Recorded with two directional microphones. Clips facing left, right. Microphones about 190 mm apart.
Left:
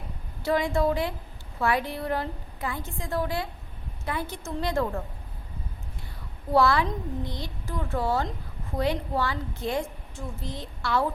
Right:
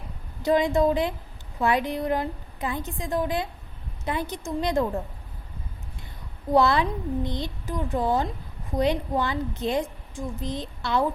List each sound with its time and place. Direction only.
0.4 s a woman's voice: 20° right (ahead or behind)
6.5 s a woman's voice: 20° right (ahead or behind)